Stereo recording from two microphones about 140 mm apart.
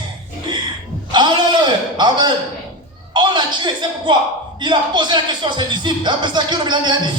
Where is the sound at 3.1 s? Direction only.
35° right (ahead or behind).